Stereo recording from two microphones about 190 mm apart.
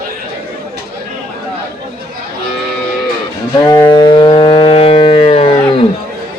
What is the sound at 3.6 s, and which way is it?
Civil defense siren, 20° left (ahead or behind).